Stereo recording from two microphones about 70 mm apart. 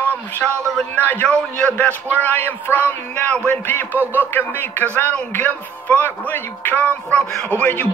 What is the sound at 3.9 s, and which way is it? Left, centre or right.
Speech, right.